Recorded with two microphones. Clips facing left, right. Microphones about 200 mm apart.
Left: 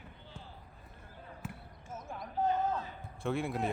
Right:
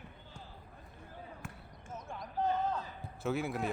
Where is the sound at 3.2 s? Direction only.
Centre (ahead or behind).